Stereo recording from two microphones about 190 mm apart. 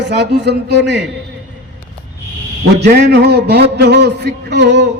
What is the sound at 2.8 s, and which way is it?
A man's voice, 60° right (ahead or behind).